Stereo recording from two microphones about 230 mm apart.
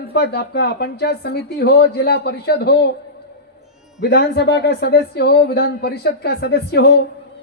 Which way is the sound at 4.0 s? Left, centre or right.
Left.